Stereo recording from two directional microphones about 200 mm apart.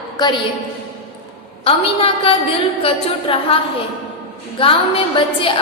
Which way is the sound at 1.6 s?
30° left (ahead or behind).